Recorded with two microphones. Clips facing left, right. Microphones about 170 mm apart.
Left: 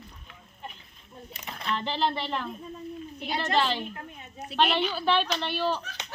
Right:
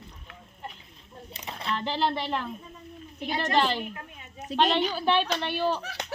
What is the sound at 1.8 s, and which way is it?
Speech, 10° right (ahead or behind).